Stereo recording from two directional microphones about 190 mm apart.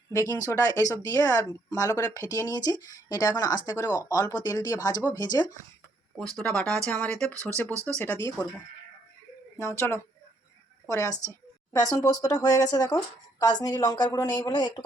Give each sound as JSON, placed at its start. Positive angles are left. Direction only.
{"t": 0.1, "sound": "speech", "side_deg": 15}
{"t": 6.3, "sound": "speech", "side_deg": 5}
{"t": 7.7, "sound": "speech", "side_deg": -15}
{"t": 7.9, "sound": "speech", "side_deg": 10}
{"t": 9.6, "sound": "a woman's voice", "side_deg": 15}